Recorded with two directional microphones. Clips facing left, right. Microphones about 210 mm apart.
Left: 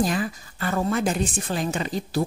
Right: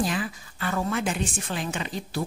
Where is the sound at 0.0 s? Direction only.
40° left (ahead or behind).